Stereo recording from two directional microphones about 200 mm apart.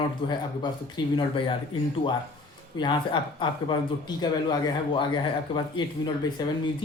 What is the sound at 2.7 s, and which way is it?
Speech, 25° left (ahead or behind).